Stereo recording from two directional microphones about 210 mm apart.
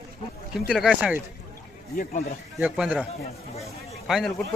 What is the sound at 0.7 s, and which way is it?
Speech, 5° right (ahead or behind).